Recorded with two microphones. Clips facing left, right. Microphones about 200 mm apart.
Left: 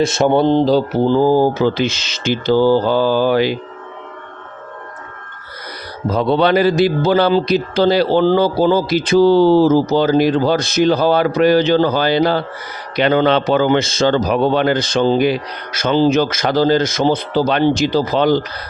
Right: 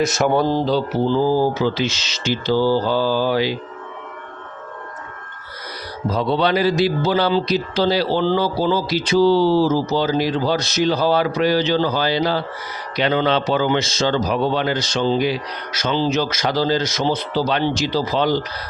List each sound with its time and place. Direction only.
0.0 s speech: 25° left (ahead or behind)
0.6 s speech: 45° left (ahead or behind)
6.1 s a man's voice: 55° left (ahead or behind)